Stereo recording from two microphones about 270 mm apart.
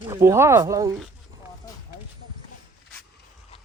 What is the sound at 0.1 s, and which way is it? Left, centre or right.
Speech, centre.